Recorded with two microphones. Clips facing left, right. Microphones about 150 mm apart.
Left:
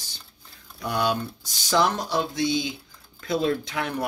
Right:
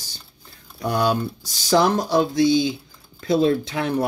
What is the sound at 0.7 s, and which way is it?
Speech, 40° right (ahead or behind).